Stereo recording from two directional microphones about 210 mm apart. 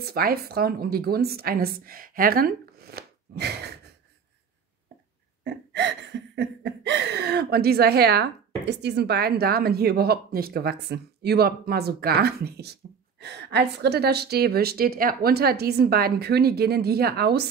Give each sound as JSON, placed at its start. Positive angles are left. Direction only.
{"t": 0.0, "sound": "a woman's voice", "side_deg": -45}
{"t": 5.4, "sound": "laughter", "side_deg": -55}
{"t": 13.2, "sound": "speech", "side_deg": -50}